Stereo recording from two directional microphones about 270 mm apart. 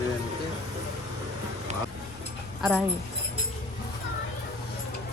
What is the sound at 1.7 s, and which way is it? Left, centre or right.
Vehicle, right.